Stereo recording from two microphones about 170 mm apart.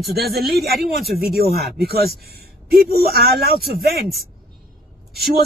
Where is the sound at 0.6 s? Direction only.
Centre (ahead or behind).